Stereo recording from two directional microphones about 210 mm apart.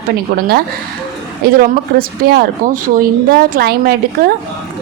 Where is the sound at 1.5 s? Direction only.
45° right (ahead or behind).